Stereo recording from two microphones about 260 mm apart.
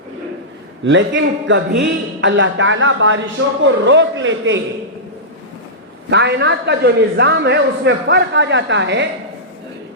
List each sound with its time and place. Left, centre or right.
0.9 s a man's voice: right
6.1 s a man's voice: right